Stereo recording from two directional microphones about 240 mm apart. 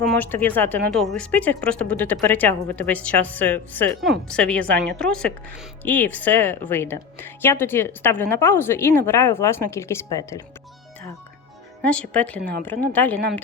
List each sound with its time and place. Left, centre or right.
0.2 s a woman's voice: centre
11.8 s a woman's voice: centre